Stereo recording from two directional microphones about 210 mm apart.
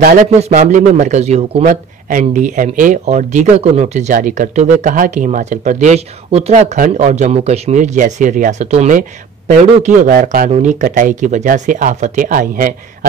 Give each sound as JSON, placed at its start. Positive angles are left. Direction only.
{"t": 0.0, "sound": "speech", "side_deg": -35}